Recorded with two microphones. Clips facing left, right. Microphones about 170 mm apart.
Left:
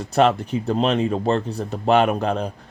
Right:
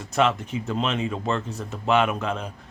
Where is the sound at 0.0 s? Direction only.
35° left (ahead or behind).